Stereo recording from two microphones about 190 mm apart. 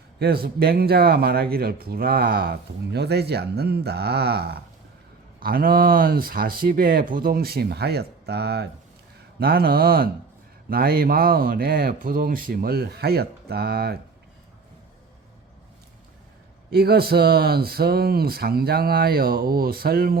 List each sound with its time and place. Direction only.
0.2 s a man's voice: 55° right (ahead or behind)
16.6 s speech: 55° right (ahead or behind)